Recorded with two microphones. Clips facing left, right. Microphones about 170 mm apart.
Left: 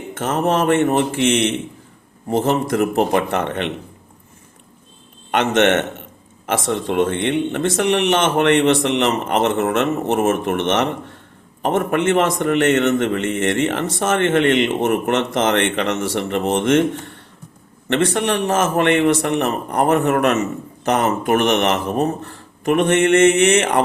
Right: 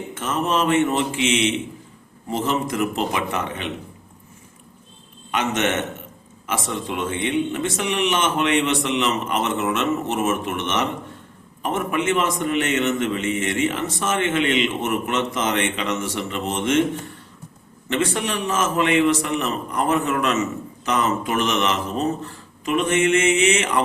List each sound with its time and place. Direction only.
0.1 s a man's voice: 60° left (ahead or behind)
5.3 s a man's voice: 60° left (ahead or behind)
17.8 s a man's voice: 65° left (ahead or behind)